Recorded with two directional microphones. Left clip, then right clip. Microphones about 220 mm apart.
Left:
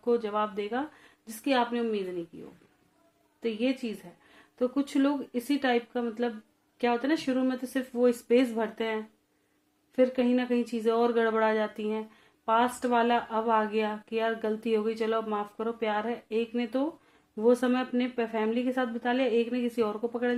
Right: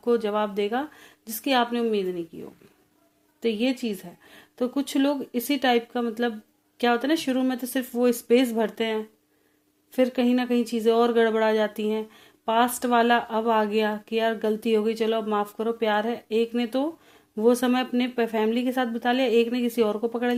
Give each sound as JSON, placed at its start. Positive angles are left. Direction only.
{"t": 0.0, "sound": "speech", "side_deg": -40}
{"t": 3.4, "sound": "speech", "side_deg": -40}